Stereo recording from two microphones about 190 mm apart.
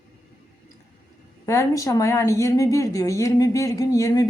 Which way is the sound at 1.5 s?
15° left (ahead or behind).